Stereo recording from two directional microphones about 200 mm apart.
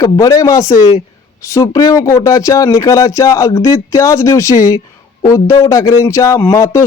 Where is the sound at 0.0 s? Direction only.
15° left (ahead or behind).